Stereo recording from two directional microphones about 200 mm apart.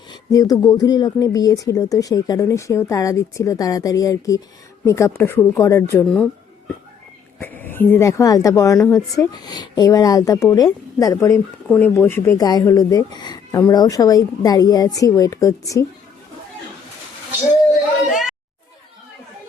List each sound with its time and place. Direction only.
0.1 s speech: 20° left (ahead or behind)
7.3 s speech: 10° left (ahead or behind)
18.1 s a sound: centre (ahead or behind)